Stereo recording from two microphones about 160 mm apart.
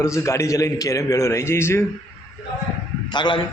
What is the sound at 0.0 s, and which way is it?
Speech, 20° left (ahead or behind).